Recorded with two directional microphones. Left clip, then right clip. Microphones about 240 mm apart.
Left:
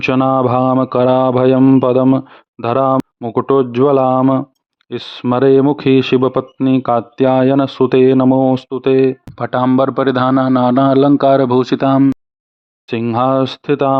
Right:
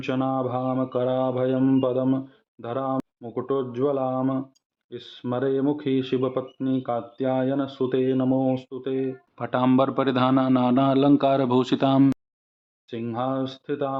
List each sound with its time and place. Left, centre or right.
0.0 s speech: left
9.3 s a man's voice: left
12.9 s speech: left